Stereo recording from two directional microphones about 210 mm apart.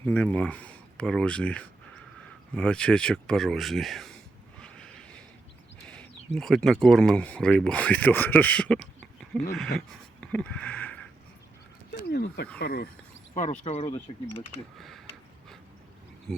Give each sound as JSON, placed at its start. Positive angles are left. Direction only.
{"t": 0.0, "sound": "speech", "side_deg": 5}
{"t": 4.6, "sound": "a sound", "side_deg": 5}
{"t": 5.9, "sound": "speech", "side_deg": 5}
{"t": 11.9, "sound": "a sound", "side_deg": 50}
{"t": 12.5, "sound": "speech", "side_deg": 45}
{"t": 13.3, "sound": "speech", "side_deg": 35}
{"t": 14.8, "sound": "speech", "side_deg": 0}